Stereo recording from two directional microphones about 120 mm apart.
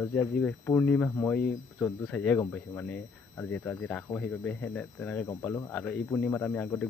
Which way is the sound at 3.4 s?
15° left (ahead or behind).